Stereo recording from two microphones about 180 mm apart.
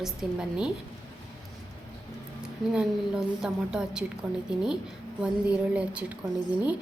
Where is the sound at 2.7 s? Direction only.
5° right (ahead or behind).